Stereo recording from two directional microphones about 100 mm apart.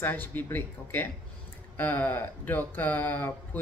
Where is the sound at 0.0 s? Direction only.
20° left (ahead or behind).